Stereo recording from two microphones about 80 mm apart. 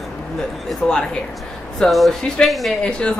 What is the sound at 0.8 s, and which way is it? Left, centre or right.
Speech, centre.